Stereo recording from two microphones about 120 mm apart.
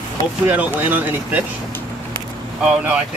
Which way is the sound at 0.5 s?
15° right (ahead or behind).